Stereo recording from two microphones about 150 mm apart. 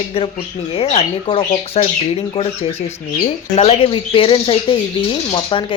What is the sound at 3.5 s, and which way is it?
Speech, 40° left (ahead or behind).